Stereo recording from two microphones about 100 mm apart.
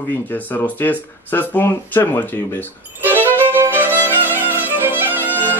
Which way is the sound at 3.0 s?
20° right (ahead or behind).